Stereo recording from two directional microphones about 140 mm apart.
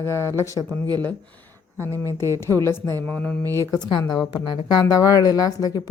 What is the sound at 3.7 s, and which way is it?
A woman's voice, 30° left (ahead or behind).